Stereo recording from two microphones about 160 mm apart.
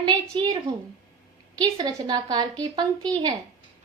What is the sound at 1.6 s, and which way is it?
A woman's voice, 25° right (ahead or behind).